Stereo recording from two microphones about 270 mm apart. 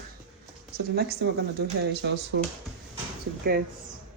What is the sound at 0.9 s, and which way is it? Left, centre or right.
Speech, right.